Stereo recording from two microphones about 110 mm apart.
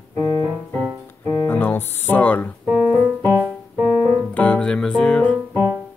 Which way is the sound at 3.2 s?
30° right (ahead or behind).